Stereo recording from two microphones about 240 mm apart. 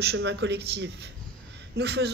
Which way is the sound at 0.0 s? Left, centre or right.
Right.